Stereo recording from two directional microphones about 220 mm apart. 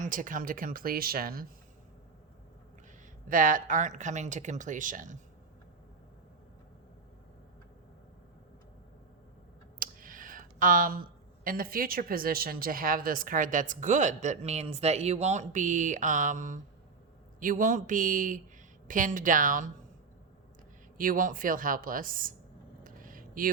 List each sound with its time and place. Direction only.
0.0 s speech: 35° right (ahead or behind)
3.2 s speech: 40° right (ahead or behind)
9.8 s clicking: 40° right (ahead or behind)
11.4 s speech: 40° right (ahead or behind)
21.0 s speech: 40° right (ahead or behind)
22.8 s a sound: 40° right (ahead or behind)